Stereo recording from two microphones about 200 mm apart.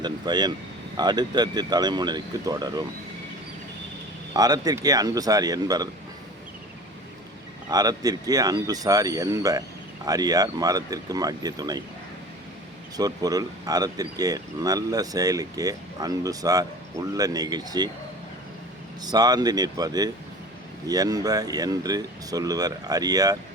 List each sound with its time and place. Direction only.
0.0 s speech: 20° right (ahead or behind)
4.4 s speech: 20° right (ahead or behind)
7.7 s speech: 20° right (ahead or behind)
13.0 s speech: 20° right (ahead or behind)
19.0 s speech: 20° right (ahead or behind)